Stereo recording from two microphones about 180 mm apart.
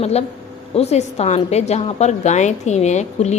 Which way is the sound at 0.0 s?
35° left (ahead or behind).